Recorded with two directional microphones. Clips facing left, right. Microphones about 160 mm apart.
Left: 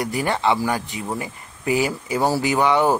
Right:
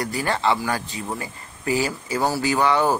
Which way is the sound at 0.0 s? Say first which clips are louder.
Left 2 dB; 20° left (ahead or behind).